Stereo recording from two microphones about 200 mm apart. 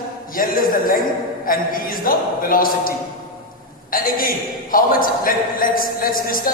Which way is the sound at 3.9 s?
45° left (ahead or behind).